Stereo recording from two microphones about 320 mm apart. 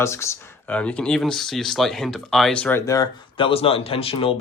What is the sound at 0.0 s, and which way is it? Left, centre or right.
Speech, centre.